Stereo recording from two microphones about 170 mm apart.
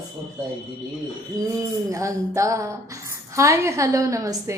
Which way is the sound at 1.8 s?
20° right (ahead or behind).